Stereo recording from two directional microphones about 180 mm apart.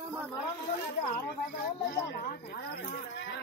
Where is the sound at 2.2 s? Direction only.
55° left (ahead or behind); by 3.4 s 75° left (ahead or behind).